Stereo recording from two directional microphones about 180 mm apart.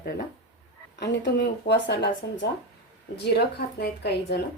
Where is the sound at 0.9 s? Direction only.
75° left (ahead or behind).